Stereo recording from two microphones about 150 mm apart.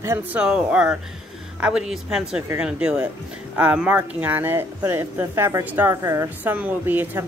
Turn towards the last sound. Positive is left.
turn(degrees=-15)  # may be behind; listen again after turning